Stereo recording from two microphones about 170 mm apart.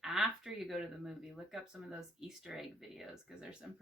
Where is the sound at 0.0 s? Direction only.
Centre (ahead or behind).